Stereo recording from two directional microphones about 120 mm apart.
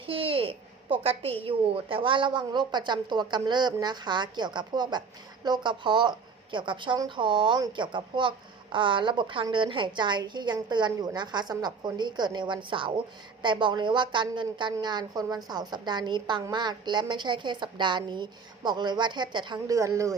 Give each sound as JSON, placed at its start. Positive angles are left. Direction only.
{"t": 0.0, "sound": "a sound", "side_deg": -50}
{"t": 1.0, "sound": "a woman's voice", "side_deg": -55}
{"t": 19.7, "sound": "speech", "side_deg": -25}